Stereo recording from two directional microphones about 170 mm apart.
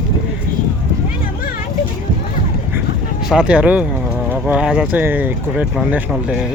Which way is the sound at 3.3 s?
5° right (ahead or behind).